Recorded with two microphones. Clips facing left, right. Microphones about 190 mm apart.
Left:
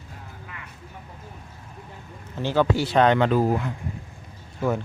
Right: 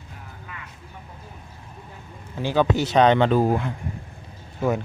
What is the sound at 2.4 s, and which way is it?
Speech, 15° right (ahead or behind).